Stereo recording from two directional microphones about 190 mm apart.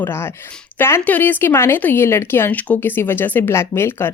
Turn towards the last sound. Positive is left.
turn(degrees=10)  # may be behind; listen again after turning